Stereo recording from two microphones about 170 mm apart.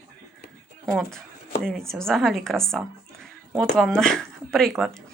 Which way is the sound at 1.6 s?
5° left (ahead or behind).